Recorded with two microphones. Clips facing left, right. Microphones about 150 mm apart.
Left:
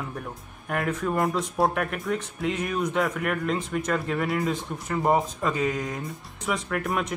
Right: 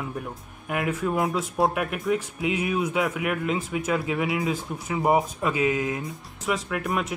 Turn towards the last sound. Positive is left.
turn(degrees=0)  # may be behind; listen again after turning